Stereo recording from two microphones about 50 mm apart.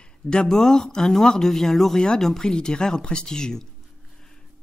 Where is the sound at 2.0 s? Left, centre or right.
Centre.